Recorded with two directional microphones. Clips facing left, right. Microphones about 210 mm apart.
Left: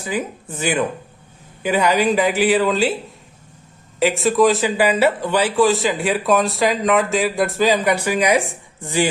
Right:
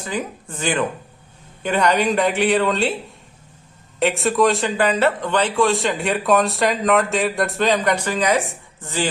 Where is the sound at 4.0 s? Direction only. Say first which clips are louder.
Left 2 dB; centre (ahead or behind).